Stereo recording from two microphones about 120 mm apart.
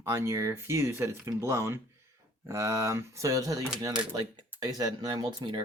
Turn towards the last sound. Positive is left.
turn(degrees=-40)  # may be behind; listen again after turning